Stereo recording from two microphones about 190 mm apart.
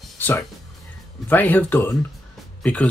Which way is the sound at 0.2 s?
15° left (ahead or behind).